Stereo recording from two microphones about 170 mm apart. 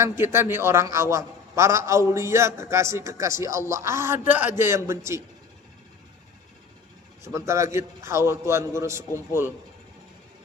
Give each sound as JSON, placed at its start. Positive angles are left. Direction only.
{"t": 0.0, "sound": "a man's voice", "side_deg": -15}
{"t": 7.3, "sound": "a man's voice", "side_deg": -15}